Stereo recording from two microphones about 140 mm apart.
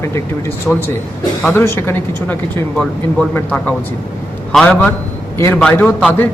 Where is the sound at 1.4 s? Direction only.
15° left (ahead or behind).